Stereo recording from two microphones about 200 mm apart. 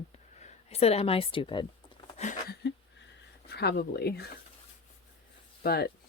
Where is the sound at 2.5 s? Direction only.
55° left (ahead or behind).